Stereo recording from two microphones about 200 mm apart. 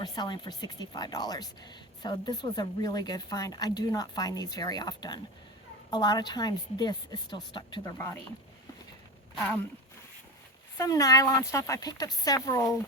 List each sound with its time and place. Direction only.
0.0 s speech: 20° left (ahead or behind)
10.8 s speech: 15° left (ahead or behind)